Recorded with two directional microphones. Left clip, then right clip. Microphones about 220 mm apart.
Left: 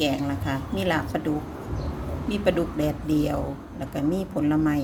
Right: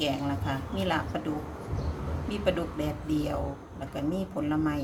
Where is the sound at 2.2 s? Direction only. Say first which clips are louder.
Left 5 dB; 20° left (ahead or behind).